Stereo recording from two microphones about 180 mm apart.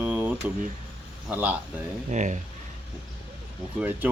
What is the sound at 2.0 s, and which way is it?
Speech, 40° right (ahead or behind).